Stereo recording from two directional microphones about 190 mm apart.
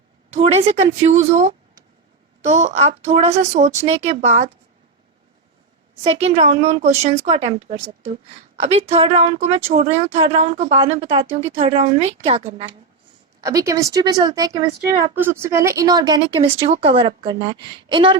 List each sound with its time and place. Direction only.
0.3 s a woman's voice: 35° right (ahead or behind)
6.2 s a woman's voice: 35° right (ahead or behind)
13.4 s speech: 15° right (ahead or behind)